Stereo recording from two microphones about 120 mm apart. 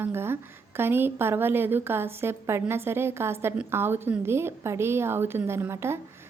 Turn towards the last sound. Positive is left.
turn(degrees=-20)  # may be behind; listen again after turning